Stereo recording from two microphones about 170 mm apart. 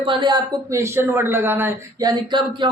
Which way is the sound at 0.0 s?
30° right (ahead or behind).